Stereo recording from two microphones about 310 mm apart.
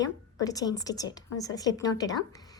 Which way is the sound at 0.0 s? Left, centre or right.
Centre.